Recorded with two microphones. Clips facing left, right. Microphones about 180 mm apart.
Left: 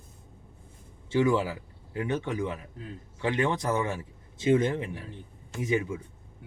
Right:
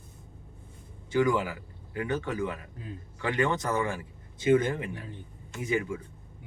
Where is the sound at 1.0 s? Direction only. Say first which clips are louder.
Left 1 dB; 25° left (ahead or behind).